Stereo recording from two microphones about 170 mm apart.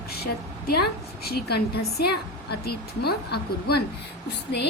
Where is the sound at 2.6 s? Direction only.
70° left (ahead or behind).